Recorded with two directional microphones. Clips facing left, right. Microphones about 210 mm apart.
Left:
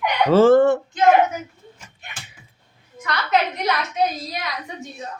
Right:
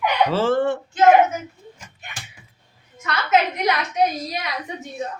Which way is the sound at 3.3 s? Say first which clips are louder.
Right 2 dB; 15° right (ahead or behind).